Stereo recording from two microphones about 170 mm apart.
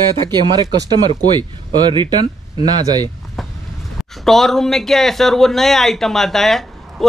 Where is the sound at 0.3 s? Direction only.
25° right (ahead or behind).